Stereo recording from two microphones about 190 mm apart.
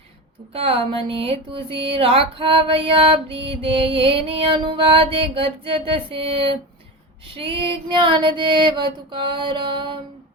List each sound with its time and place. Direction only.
0.5 s speech: 30° right (ahead or behind)